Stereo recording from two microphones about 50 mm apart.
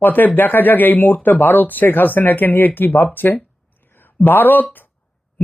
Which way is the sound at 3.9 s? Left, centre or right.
Left.